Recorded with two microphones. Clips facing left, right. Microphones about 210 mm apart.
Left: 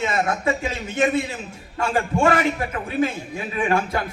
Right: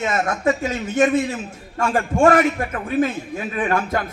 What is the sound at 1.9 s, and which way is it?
Speech, 45° right (ahead or behind).